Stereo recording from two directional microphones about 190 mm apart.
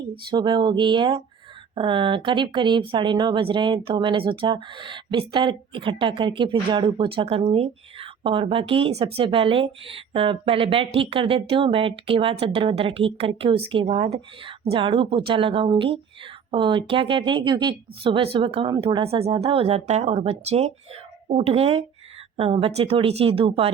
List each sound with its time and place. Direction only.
0.3 s speech: 25° right (ahead or behind)